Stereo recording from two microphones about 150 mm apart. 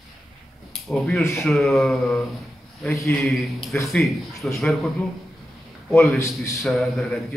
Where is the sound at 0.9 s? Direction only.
5° left (ahead or behind).